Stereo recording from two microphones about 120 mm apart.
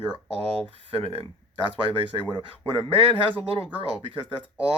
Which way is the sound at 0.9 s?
55° right (ahead or behind).